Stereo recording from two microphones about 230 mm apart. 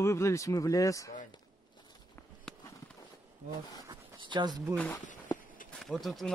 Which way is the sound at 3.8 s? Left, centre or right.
Centre.